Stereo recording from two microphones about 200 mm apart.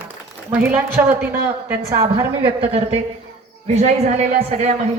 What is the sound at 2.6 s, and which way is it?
Speech, 30° right (ahead or behind).